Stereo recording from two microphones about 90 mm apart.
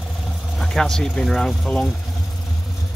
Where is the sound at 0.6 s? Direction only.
5° left (ahead or behind).